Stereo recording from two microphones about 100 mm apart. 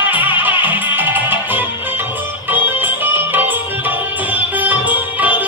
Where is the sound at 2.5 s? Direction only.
20° right (ahead or behind).